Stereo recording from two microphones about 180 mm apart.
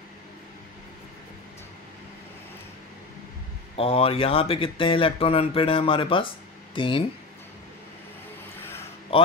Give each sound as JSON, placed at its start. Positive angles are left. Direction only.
{"t": 3.7, "sound": "speech", "side_deg": 30}
{"t": 9.1, "sound": "a man's voice", "side_deg": 30}